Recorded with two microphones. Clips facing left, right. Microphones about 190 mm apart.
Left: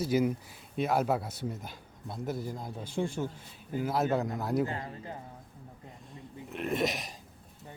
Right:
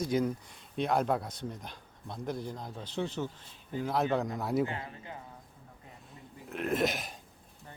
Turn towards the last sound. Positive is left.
turn(degrees=0)  # may be behind; listen again after turning